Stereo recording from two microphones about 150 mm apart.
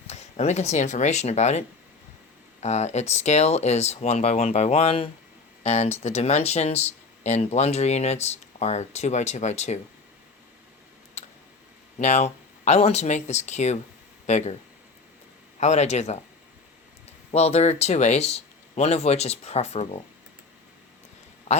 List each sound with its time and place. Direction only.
0.1 s speech: 50° left (ahead or behind)
11.2 s tick: 50° left (ahead or behind)
11.9 s speech: 50° left (ahead or behind)
15.6 s speech: 50° left (ahead or behind)
17.3 s speech: 45° left (ahead or behind)
21.5 s a sound: 50° left (ahead or behind)